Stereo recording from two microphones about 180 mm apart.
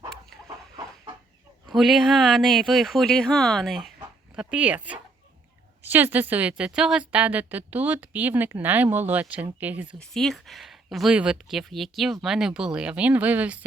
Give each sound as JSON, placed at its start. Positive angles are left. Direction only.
{"t": 1.6, "sound": "a woman's voice", "side_deg": 0}
{"t": 10.0, "sound": "speech", "side_deg": 0}